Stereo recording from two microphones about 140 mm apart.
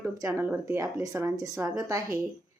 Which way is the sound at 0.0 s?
20° right (ahead or behind).